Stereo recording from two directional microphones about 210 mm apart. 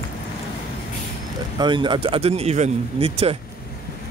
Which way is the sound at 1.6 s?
20° right (ahead or behind).